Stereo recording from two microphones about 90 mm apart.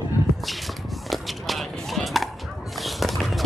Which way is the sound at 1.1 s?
Centre (ahead or behind).